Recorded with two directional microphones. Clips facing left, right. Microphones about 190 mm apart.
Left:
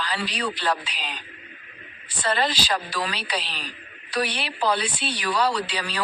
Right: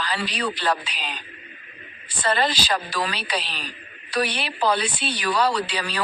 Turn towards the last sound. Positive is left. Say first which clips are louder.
# right 2 dB
turn(degrees=-50)  # may be behind; listen again after turning